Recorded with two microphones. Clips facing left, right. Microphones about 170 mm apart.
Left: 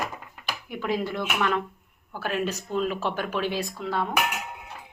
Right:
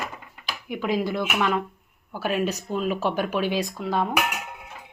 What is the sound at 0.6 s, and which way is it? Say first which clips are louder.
Speech: right 3 dB; 15° right (ahead or behind).